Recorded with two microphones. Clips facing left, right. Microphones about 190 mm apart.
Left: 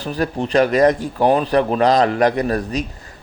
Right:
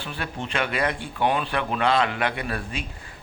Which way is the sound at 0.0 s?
40° left (ahead or behind).